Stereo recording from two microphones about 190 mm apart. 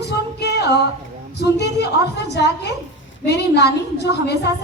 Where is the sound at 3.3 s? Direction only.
60° left (ahead or behind).